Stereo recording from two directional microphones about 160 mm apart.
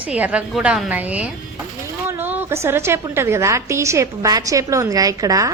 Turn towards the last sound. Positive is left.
turn(degrees=-20)  # may be behind; listen again after turning